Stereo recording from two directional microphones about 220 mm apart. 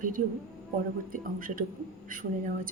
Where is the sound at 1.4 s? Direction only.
40° right (ahead or behind).